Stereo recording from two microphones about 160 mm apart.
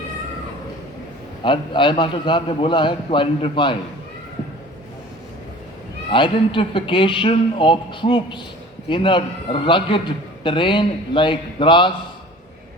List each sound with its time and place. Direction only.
1.5 s a man's voice: 30° left (ahead or behind)
6.1 s a man's voice: 30° left (ahead or behind)